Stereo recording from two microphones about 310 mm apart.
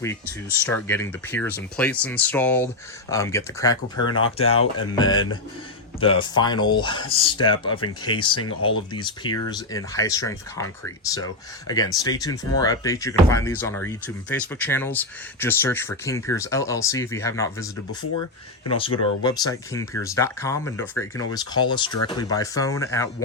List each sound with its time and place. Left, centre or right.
0.6 s speech: centre
18.8 s speech: centre